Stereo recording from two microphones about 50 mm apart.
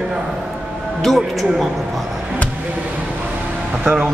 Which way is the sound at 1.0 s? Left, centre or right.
Centre.